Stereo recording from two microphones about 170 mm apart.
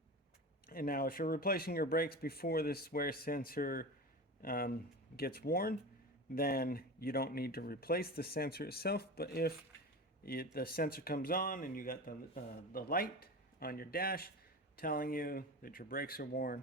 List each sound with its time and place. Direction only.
0.7 s speech: 60° left (ahead or behind)